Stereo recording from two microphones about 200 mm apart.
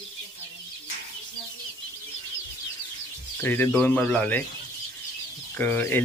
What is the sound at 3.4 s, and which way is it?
Speech, 10° left (ahead or behind).